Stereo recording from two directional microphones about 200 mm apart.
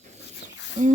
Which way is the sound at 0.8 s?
40° right (ahead or behind).